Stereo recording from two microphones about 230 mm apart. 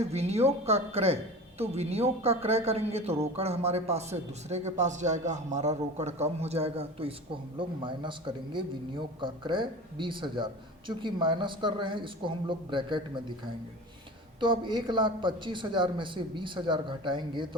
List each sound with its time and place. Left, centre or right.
0.0 s speech: right
14.4 s speech: right